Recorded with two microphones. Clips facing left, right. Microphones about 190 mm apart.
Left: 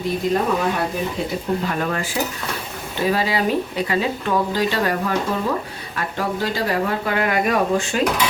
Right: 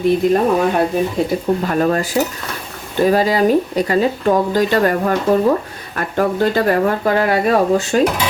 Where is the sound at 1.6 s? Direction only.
40° right (ahead or behind).